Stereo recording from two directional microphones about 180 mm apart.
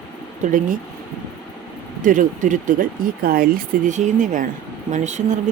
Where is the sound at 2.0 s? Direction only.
50° right (ahead or behind).